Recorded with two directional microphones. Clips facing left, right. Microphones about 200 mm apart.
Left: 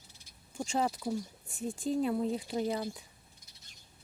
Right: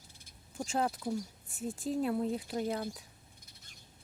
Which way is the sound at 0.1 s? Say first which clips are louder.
Right 1 dB; 55° right (ahead or behind).